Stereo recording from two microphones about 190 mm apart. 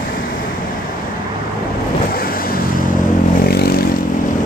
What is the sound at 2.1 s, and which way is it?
Vehicle, 50° left (ahead or behind).